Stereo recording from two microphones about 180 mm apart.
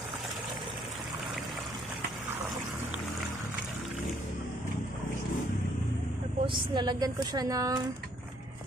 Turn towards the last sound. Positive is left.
turn(degrees=-20)  # may be behind; listen again after turning